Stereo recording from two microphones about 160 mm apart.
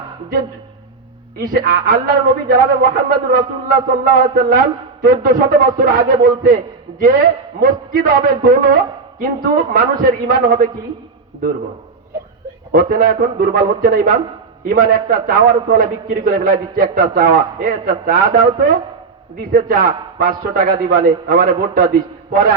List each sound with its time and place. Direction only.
1.6 s a man's voice: 60° right (ahead or behind)
12.7 s a man's voice: 60° right (ahead or behind)